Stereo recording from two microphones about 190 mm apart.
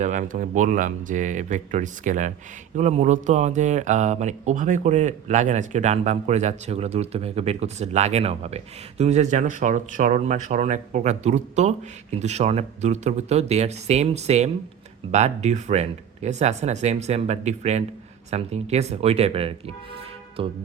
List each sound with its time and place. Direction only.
0.0 s speech: 40° right (ahead or behind)
20.4 s music: 30° right (ahead or behind)